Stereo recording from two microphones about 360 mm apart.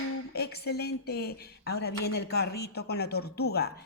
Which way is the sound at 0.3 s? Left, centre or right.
Left.